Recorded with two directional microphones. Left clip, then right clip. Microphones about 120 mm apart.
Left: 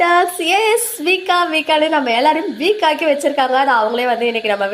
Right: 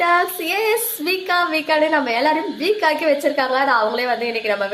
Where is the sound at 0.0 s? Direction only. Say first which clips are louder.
Left 4 dB; 30° left (ahead or behind).